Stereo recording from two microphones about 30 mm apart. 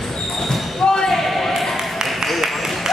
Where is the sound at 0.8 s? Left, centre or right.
Left.